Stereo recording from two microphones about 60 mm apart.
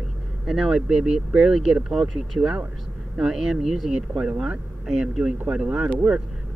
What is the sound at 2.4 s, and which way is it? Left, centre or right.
Speech, centre.